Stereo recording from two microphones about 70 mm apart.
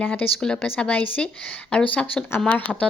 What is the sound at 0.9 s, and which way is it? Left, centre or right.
A woman's voice, left.